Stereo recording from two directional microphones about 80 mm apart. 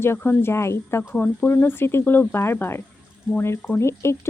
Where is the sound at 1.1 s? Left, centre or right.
Left.